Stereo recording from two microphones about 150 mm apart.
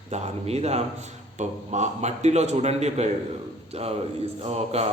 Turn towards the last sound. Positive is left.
turn(degrees=-45)  # may be behind; listen again after turning